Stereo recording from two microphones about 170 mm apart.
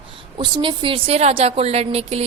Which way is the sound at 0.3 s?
30° right (ahead or behind).